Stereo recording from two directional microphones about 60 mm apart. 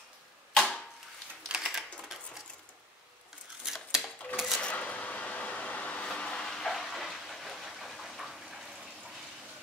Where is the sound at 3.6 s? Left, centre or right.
Centre.